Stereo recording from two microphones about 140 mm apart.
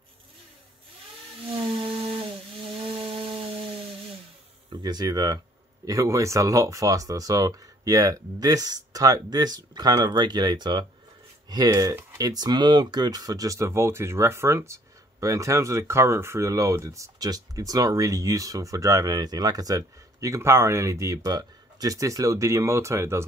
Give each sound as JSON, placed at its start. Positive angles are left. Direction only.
{"t": 1.5, "sound": "music", "side_deg": -40}
{"t": 3.0, "sound": "a sound", "side_deg": -40}
{"t": 4.6, "sound": "speech", "side_deg": -30}